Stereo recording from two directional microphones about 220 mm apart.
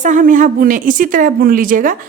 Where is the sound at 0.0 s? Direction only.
35° right (ahead or behind).